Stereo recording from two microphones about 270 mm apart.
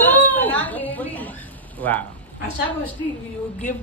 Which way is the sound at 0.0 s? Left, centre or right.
Centre.